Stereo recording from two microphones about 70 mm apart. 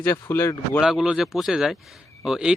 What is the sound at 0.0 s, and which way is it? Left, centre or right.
Speech, left.